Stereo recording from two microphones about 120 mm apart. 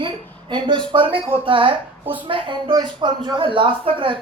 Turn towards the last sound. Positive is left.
turn(degrees=-45)  # may be behind; listen again after turning